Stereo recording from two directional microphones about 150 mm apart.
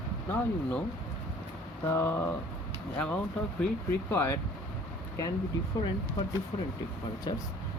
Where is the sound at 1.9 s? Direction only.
15° left (ahead or behind).